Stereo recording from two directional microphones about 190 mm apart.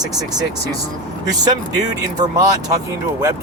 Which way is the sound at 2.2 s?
20° right (ahead or behind).